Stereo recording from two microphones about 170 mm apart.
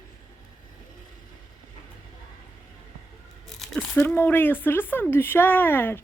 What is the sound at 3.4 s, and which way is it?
Speech, centre (ahead or behind).